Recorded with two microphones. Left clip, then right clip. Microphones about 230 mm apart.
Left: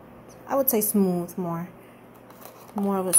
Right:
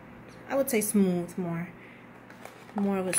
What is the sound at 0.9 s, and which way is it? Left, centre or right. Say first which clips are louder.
Speech: left 3 dB; centre.